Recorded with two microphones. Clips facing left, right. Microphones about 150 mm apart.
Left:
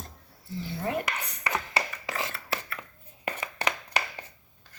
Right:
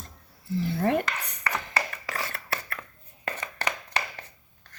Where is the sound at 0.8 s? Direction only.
60° right (ahead or behind).